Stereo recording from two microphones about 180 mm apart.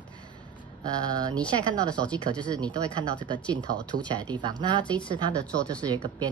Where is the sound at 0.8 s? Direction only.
20° right (ahead or behind).